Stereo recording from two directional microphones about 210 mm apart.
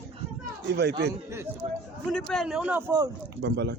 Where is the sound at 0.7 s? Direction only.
50° right (ahead or behind).